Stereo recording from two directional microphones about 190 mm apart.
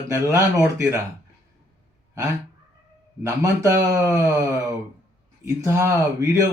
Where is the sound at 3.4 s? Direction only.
15° right (ahead or behind).